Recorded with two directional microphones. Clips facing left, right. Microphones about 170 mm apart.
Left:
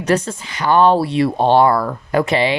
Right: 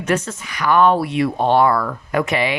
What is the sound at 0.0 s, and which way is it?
Speech, 30° left (ahead or behind).